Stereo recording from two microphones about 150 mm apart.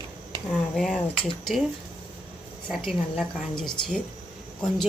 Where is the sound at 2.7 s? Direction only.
Centre (ahead or behind).